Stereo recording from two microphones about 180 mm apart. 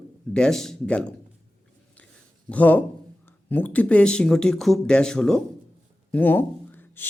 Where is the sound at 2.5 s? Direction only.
10° left (ahead or behind).